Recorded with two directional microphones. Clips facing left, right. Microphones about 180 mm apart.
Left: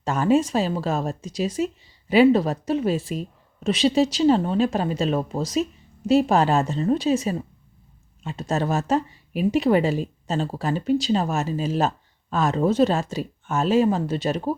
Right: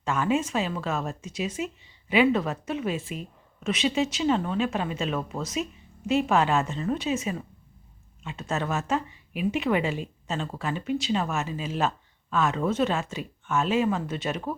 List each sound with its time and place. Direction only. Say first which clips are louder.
0.0 s speech: left 6 dB; 40° left (ahead or behind)